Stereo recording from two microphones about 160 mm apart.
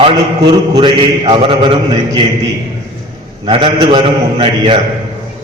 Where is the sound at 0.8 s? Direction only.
35° right (ahead or behind).